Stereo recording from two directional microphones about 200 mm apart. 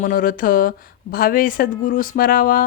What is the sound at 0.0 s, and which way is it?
Speech, 45° left (ahead or behind).